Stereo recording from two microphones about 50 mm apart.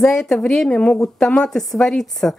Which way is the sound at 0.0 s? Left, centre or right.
Centre.